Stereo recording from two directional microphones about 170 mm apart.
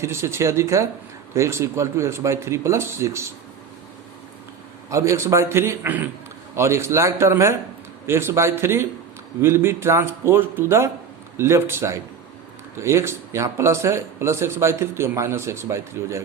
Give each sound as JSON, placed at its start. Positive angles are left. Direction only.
{"t": 0.0, "sound": "speech", "side_deg": -15}
{"t": 4.9, "sound": "speech", "side_deg": -15}